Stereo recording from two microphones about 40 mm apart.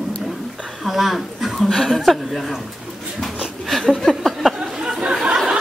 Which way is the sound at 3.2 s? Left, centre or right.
Centre.